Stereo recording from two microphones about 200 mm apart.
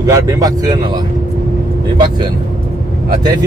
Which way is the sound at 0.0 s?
15° right (ahead or behind).